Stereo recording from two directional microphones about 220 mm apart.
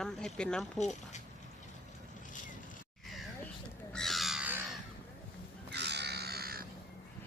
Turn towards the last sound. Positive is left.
turn(degrees=-45)  # may be behind; listen again after turning